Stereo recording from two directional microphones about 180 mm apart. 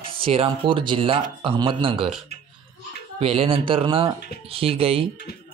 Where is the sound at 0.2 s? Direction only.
30° right (ahead or behind).